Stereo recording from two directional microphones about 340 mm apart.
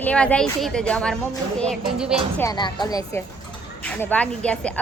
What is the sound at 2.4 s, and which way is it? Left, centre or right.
Speech, centre.